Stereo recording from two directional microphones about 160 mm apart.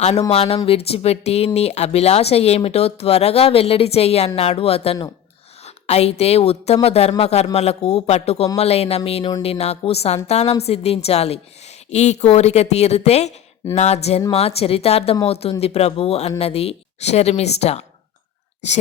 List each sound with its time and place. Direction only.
0.3 s a woman's voice: 40° left (ahead or behind)